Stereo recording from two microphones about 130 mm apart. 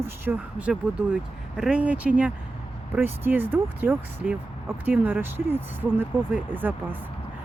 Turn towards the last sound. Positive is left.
turn(degrees=-15)  # may be behind; listen again after turning